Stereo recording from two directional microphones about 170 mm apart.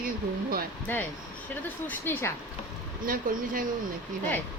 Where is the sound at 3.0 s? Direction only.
55° right (ahead or behind).